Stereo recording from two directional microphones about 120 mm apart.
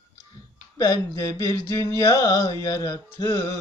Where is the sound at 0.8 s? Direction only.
30° left (ahead or behind).